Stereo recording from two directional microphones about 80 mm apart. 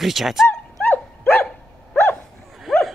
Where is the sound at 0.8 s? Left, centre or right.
Left.